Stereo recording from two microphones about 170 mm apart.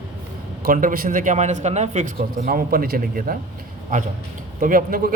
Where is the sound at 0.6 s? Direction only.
55° right (ahead or behind).